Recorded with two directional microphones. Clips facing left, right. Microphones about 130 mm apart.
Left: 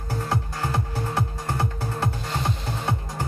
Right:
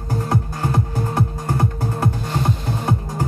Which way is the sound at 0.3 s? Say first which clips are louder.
Right 5 dB; 45° right (ahead or behind).